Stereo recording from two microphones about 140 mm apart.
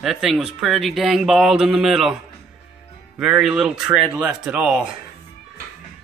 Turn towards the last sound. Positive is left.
turn(degrees=-5)  # may be behind; listen again after turning